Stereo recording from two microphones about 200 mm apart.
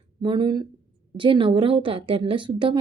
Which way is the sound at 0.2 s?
25° right (ahead or behind).